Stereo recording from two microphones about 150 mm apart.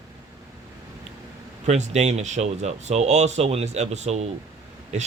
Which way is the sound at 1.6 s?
50° right (ahead or behind).